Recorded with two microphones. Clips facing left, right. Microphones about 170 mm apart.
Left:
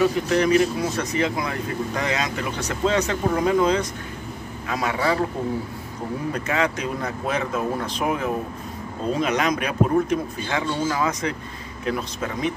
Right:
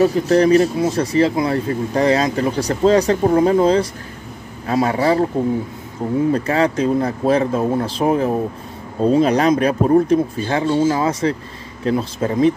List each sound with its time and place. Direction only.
0.0 s speech: 35° right (ahead or behind)
6.3 s speech: 30° right (ahead or behind)